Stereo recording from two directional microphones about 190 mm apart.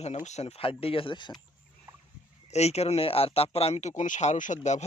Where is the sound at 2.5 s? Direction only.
35° left (ahead or behind).